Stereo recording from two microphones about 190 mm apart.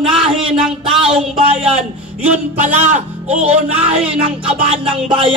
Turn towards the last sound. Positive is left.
turn(degrees=-30)  # may be behind; listen again after turning